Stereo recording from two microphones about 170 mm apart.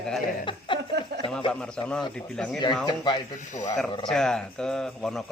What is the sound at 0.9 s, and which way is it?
Speech, 80° right.